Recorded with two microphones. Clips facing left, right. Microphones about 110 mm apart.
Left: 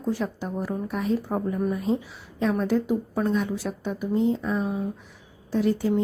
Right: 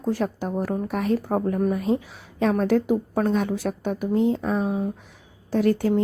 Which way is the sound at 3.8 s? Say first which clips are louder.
Right 2 dB; 55° right (ahead or behind).